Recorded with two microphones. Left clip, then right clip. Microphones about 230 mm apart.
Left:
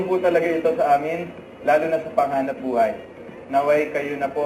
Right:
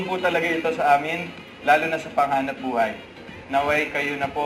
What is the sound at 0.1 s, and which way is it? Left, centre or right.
Speech, right.